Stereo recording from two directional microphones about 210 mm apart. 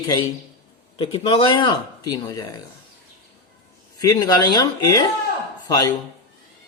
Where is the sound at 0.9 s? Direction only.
25° left (ahead or behind).